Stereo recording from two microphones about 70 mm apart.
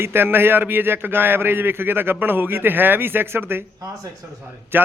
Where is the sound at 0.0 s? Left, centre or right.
Right.